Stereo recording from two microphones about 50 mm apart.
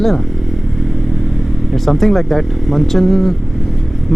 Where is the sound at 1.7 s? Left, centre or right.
Centre.